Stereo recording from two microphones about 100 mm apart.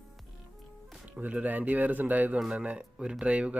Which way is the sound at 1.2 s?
15° right (ahead or behind).